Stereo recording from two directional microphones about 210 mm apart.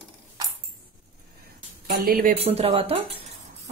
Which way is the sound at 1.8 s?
45° right (ahead or behind).